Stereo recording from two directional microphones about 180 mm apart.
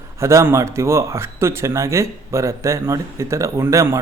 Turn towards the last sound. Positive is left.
turn(degrees=-15)  # may be behind; listen again after turning